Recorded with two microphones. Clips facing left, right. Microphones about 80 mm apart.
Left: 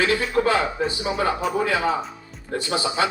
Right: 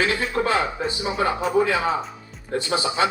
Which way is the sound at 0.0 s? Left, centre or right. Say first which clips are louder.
Left 2 dB; right.